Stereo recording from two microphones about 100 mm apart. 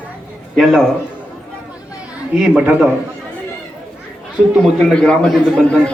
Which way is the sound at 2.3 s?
5° right (ahead or behind).